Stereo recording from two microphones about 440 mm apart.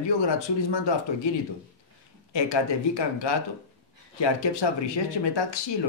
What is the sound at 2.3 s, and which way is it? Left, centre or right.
Speech, left.